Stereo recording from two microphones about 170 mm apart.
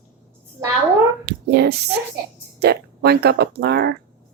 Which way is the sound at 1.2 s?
65° right (ahead or behind).